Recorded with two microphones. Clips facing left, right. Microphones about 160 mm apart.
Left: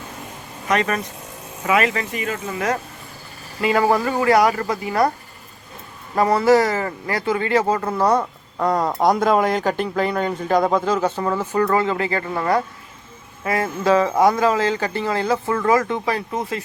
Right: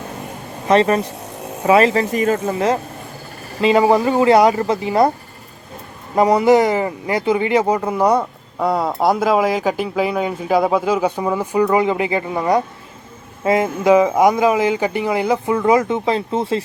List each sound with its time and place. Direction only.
0.7 s speech: 30° right (ahead or behind)
6.1 s speech: 20° right (ahead or behind)